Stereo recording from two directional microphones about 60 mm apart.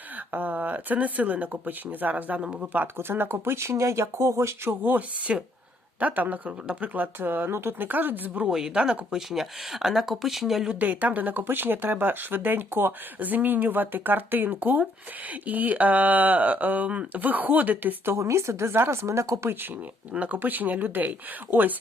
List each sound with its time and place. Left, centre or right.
0.3 s speech: right
2.4 s speech: centre
2.7 s speech: right
8.4 s speech: centre
10.8 s speech: right
18.0 s speech: right
20.1 s speech: right